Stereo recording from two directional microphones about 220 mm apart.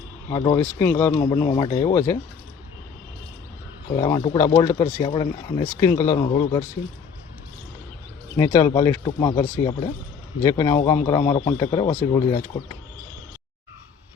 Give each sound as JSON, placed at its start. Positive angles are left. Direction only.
{"t": 0.3, "sound": "speech", "side_deg": 15}
{"t": 1.1, "sound": "speech", "side_deg": 20}
{"t": 3.9, "sound": "speech", "side_deg": 20}
{"t": 8.4, "sound": "speech", "side_deg": 15}